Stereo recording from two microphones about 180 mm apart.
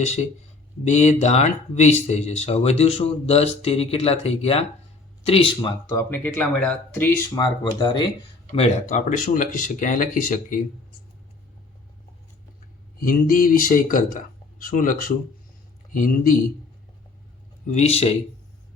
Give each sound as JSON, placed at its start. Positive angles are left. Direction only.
{"t": 0.9, "sound": "speech", "side_deg": 40}
{"t": 8.5, "sound": "speech", "side_deg": 40}
{"t": 13.0, "sound": "speech", "side_deg": 50}
{"t": 17.7, "sound": "speech", "side_deg": 35}